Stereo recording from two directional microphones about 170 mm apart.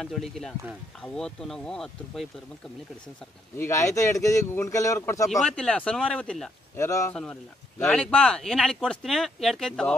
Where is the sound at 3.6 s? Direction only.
15° left (ahead or behind).